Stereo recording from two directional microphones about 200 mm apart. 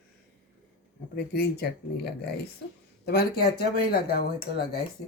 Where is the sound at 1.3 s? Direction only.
55° left (ahead or behind).